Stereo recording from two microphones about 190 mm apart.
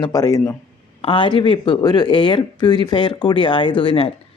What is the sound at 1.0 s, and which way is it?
Speech, 25° left (ahead or behind).